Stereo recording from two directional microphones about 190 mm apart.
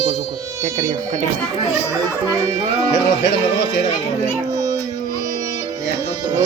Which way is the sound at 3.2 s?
65° left (ahead or behind).